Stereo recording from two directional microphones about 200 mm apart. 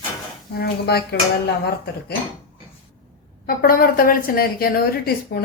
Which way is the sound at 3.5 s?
50° left (ahead or behind).